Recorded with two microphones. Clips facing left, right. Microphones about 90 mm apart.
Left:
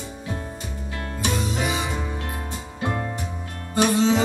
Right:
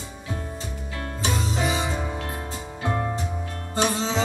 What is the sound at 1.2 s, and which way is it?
Music, 30° right (ahead or behind).